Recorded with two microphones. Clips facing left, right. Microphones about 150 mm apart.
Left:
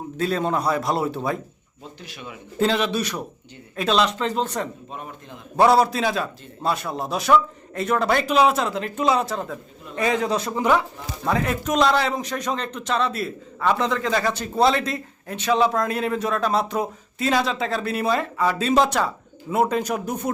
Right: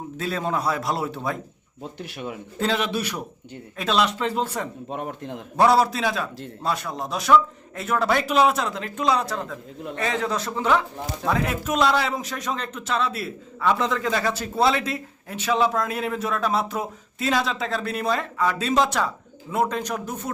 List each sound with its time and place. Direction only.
0.2 s a man's voice: centre (ahead or behind)
2.0 s speech: 55° right (ahead or behind)
2.6 s speech: centre (ahead or behind)
4.9 s a man's voice: 65° right (ahead or behind)
5.5 s a man's voice: centre (ahead or behind)
9.9 s a man's voice: 15° left (ahead or behind)
11.3 s a man's voice: centre (ahead or behind)